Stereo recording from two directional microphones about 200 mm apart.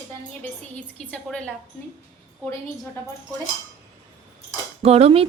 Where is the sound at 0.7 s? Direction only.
5° left (ahead or behind).